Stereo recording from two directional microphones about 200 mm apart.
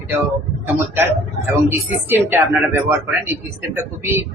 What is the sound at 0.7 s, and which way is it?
Speech, 10° right (ahead or behind).